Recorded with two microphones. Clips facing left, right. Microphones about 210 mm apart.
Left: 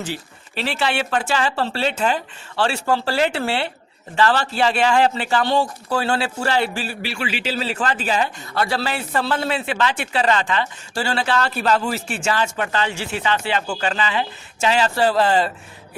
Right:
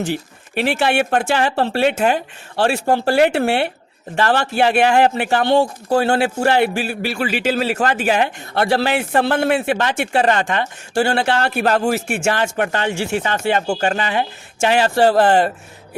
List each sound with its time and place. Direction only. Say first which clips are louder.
0.5 s speech: right 5 dB; 50° right (ahead or behind)
7.9 s speech: right 4 dB; 60° right (ahead or behind)